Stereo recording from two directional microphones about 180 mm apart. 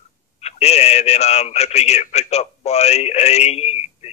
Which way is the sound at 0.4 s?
35° left (ahead or behind).